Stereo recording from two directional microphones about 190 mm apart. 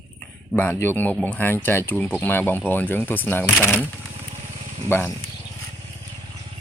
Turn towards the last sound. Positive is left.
turn(degrees=10)  # may be behind; listen again after turning